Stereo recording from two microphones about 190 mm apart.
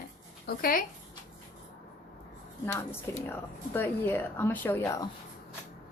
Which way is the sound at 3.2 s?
10° left (ahead or behind).